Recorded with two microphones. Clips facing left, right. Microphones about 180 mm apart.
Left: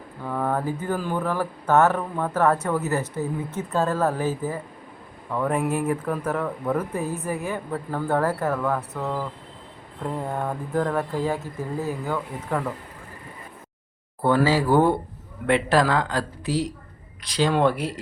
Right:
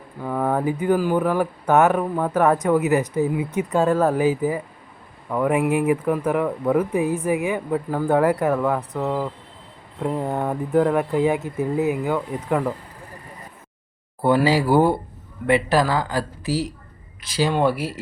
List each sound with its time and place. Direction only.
0.3 s speech: 15° right (ahead or behind)
14.2 s speech: 10° right (ahead or behind)